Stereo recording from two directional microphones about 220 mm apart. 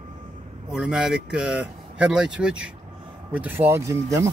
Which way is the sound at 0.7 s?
5° right (ahead or behind).